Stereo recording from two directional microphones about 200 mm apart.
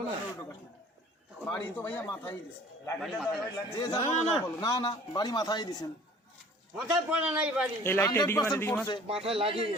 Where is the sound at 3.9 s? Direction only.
35° left (ahead or behind).